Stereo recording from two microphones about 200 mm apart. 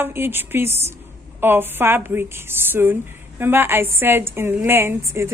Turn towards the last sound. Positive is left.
turn(degrees=-10)  # may be behind; listen again after turning